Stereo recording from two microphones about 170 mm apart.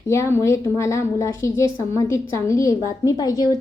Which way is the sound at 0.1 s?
15° left (ahead or behind).